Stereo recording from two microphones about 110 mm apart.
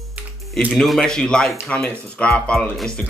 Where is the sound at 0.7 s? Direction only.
5° left (ahead or behind).